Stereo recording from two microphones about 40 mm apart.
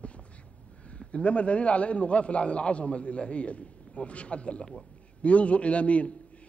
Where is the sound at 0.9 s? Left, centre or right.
Left.